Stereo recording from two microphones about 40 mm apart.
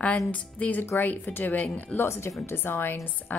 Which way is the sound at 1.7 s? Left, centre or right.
Left.